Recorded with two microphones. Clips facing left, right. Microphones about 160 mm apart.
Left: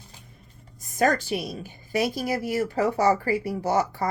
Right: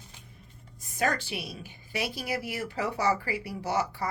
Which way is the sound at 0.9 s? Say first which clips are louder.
Left 7 dB; 45° left (ahead or behind).